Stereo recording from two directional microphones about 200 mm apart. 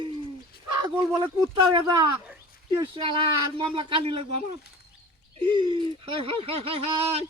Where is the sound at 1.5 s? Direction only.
20° right (ahead or behind).